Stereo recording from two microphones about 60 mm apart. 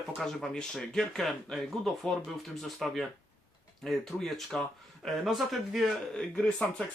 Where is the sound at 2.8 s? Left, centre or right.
Centre.